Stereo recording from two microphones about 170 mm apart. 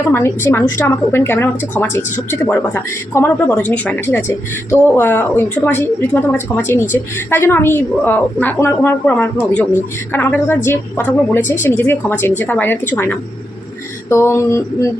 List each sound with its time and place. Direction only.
0.1 s a woman's voice: 15° left (ahead or behind)